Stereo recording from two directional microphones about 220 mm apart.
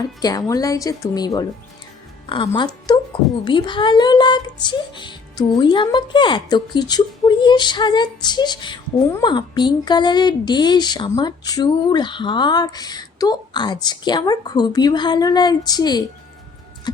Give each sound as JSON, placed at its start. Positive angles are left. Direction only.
{"t": 0.2, "sound": "speech", "side_deg": 15}
{"t": 2.5, "sound": "speech", "side_deg": 20}